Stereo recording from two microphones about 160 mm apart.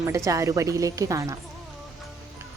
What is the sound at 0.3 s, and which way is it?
A woman's voice, 20° right (ahead or behind).